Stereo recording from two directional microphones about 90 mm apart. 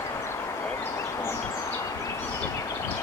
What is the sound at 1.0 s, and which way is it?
Bird, 30° left (ahead or behind).